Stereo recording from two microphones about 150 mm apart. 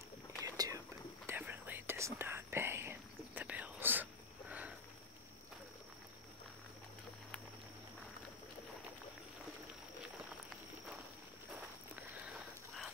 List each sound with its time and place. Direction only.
0.4 s whispering: 25° right (ahead or behind)